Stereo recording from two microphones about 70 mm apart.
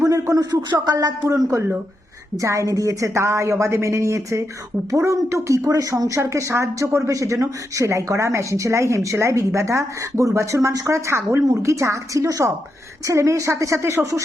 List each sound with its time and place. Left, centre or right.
0.0 s a sound: right
0.5 s speech: right
0.9 s speech: right
1.5 s a woman's voice: right